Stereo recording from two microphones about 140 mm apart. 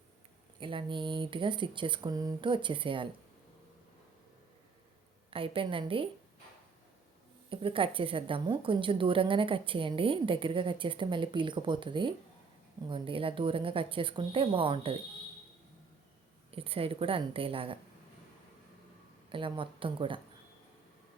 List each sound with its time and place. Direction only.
0.6 s a woman's voice: 35° right (ahead or behind)
5.3 s a woman's voice: 40° right (ahead or behind)
7.5 s a woman's voice: 40° right (ahead or behind)
16.5 s a woman's voice: 40° right (ahead or behind)
19.3 s a woman's voice: 40° right (ahead or behind)